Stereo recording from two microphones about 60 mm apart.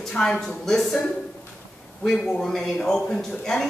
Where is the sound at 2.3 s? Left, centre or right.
Centre.